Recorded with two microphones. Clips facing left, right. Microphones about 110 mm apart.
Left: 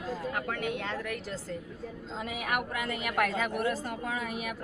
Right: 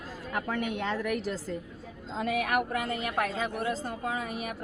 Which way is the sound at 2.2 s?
60° right (ahead or behind).